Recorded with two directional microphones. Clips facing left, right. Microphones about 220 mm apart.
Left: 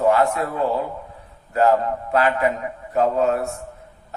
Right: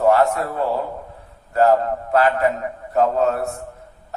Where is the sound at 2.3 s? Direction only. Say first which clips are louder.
Right 1 dB; 40° right (ahead or behind).